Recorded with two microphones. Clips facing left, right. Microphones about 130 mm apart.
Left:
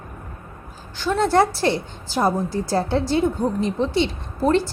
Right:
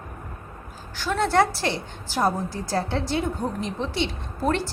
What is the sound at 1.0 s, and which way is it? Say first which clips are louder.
A woman's voice: left 3 dB; 30° left (ahead or behind).